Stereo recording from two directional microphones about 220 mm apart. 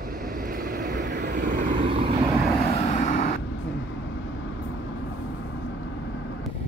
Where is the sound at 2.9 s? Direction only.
35° left (ahead or behind).